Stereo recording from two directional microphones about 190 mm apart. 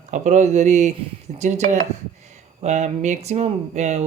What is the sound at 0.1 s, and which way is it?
Speech, 40° right (ahead or behind).